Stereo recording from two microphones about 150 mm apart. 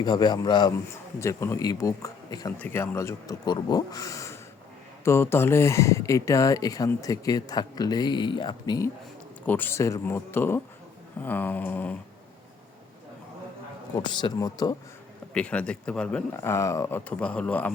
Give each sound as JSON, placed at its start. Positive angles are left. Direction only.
{"t": 0.0, "sound": "speech", "side_deg": 30}
{"t": 1.2, "sound": "speech", "side_deg": 20}
{"t": 9.5, "sound": "speech", "side_deg": 15}
{"t": 13.9, "sound": "a man's voice", "side_deg": 30}
{"t": 15.3, "sound": "speech", "side_deg": 5}
{"t": 16.4, "sound": "speech", "side_deg": 20}
{"t": 17.1, "sound": "speech", "side_deg": 10}